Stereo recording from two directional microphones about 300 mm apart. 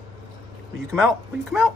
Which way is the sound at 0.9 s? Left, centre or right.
Centre.